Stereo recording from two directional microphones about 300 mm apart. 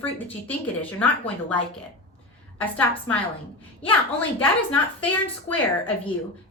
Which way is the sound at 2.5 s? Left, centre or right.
Centre.